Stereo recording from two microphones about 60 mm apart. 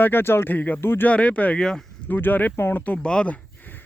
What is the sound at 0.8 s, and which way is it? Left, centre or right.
Speech, left.